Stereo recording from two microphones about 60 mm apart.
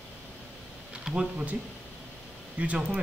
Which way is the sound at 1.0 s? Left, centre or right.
Centre.